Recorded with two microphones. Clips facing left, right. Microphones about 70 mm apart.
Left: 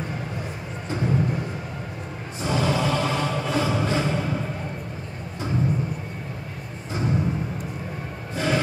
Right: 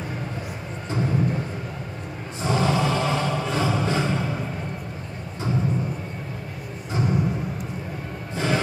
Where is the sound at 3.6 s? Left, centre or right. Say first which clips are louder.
Even; right.